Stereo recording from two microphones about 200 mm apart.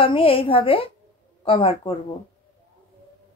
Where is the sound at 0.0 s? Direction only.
30° left (ahead or behind).